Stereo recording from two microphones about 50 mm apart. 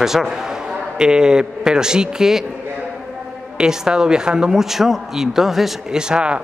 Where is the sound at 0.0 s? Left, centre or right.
Centre.